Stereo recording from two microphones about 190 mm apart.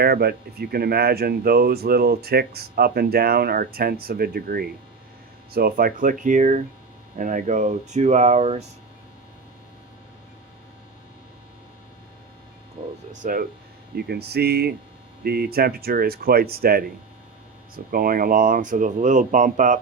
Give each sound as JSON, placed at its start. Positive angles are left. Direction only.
{"t": 0.0, "sound": "speech", "side_deg": -55}
{"t": 13.2, "sound": "speech", "side_deg": -45}
{"t": 13.9, "sound": "speech", "side_deg": -60}
{"t": 17.9, "sound": "speech", "side_deg": -50}